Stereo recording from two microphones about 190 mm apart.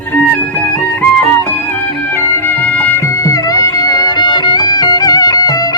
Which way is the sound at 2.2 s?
10° left (ahead or behind).